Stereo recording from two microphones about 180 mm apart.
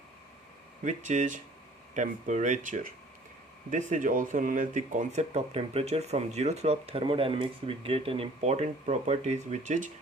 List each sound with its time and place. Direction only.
0.9 s speech: 40° right (ahead or behind)